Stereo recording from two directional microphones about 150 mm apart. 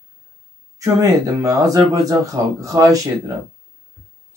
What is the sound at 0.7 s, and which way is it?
Speech, 20° right (ahead or behind).